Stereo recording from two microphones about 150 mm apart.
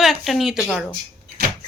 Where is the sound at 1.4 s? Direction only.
90° right.